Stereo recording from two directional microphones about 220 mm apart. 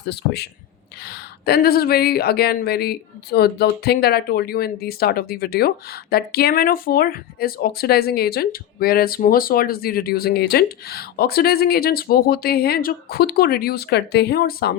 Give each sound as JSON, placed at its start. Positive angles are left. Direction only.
{"t": 0.1, "sound": "speech", "side_deg": 50}